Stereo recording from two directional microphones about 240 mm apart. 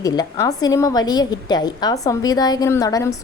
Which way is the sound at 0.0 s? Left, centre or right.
Centre.